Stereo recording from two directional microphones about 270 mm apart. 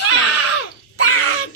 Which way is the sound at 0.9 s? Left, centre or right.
Left.